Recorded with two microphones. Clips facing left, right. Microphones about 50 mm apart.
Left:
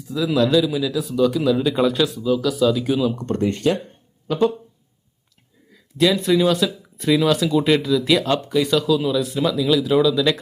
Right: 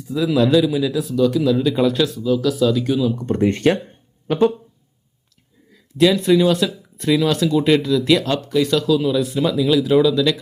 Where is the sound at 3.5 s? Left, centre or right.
Right.